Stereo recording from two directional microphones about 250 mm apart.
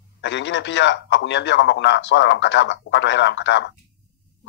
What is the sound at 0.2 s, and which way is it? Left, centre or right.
A man's voice, left.